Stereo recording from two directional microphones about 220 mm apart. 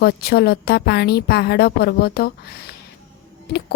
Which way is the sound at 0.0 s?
45° left (ahead or behind).